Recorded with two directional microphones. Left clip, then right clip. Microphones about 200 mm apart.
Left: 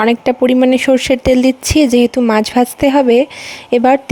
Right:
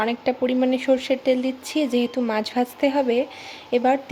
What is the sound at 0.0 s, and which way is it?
Speech, 50° left (ahead or behind).